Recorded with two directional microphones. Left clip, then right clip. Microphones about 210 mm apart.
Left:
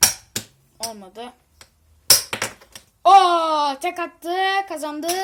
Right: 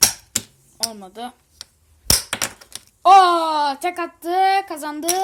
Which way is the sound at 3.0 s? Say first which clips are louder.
Right 1 dB; 25° right (ahead or behind).